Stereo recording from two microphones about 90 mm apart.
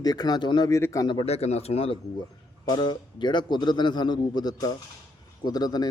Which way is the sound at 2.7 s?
55° left (ahead or behind).